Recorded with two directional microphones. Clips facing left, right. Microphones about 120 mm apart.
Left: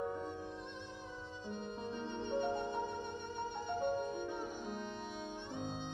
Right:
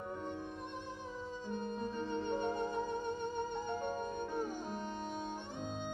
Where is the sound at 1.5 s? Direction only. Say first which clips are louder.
Right 3 dB; 45° right (ahead or behind).